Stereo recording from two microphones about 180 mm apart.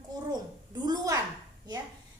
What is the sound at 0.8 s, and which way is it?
Speech, 20° right (ahead or behind).